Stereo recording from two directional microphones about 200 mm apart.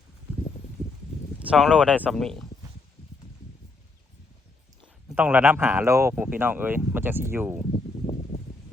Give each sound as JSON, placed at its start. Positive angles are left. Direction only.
{"t": 1.4, "sound": "speech", "side_deg": -5}
{"t": 5.0, "sound": "speech", "side_deg": -5}
{"t": 7.7, "sound": "a sound", "side_deg": 30}